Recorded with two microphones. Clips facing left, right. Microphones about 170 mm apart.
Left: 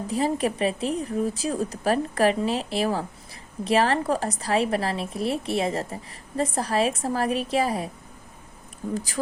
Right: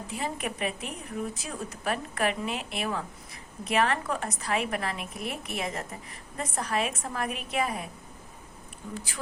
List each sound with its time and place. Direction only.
0.1 s a woman's voice: 35° left (ahead or behind)
9.0 s a woman's voice: 40° left (ahead or behind)